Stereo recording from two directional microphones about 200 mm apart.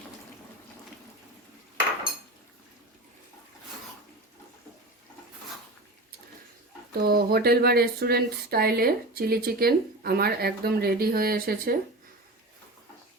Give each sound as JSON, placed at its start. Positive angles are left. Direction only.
{"t": 7.0, "sound": "speech", "side_deg": -50}